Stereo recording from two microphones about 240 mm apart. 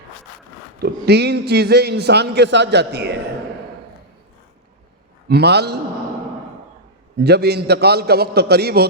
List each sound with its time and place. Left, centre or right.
0.8 s a man's voice: right
5.3 s a man's voice: right
7.3 s a man's voice: right